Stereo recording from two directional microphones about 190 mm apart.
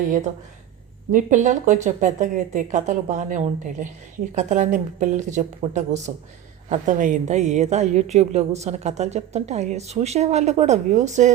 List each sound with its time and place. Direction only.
1.1 s a woman's voice: 40° right (ahead or behind)